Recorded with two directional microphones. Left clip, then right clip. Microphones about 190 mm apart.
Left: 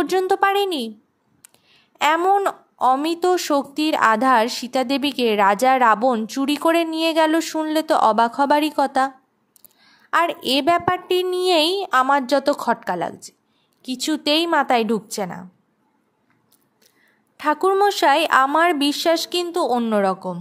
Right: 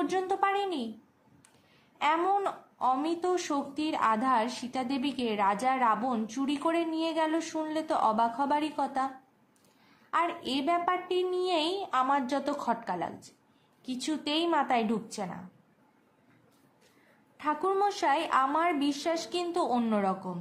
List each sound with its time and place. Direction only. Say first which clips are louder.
0.0 s speech: left 10 dB; 45° left (ahead or behind)
2.0 s speech: left 10 dB; 45° left (ahead or behind)
10.1 s speech: left 11 dB; 50° left (ahead or behind)
17.4 s speech: left 11 dB; 50° left (ahead or behind)